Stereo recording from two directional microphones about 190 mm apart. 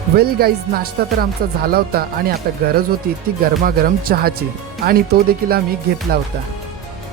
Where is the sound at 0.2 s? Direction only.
55° right (ahead or behind).